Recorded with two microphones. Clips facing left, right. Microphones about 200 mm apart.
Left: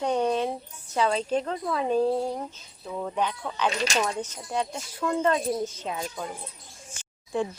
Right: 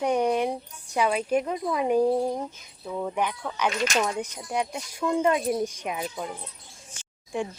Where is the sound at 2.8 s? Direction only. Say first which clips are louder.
Right 2 dB; centre (ahead or behind).